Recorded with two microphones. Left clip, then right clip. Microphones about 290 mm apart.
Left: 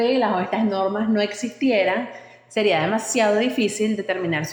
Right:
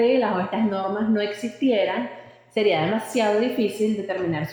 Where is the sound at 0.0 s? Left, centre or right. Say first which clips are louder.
Even; centre.